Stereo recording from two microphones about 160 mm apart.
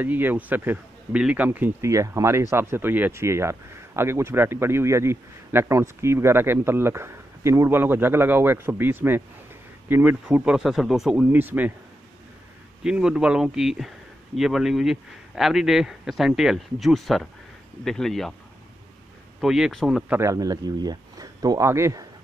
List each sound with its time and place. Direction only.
0.0 s a man's voice: 10° right (ahead or behind)
12.8 s speech: 5° right (ahead or behind)
19.4 s speech: centre (ahead or behind)
20.1 s speech: 20° right (ahead or behind)